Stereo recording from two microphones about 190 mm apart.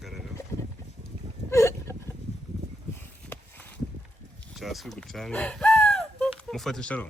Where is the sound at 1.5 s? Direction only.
15° left (ahead or behind).